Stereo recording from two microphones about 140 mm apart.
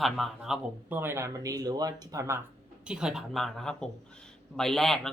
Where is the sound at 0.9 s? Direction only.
15° right (ahead or behind).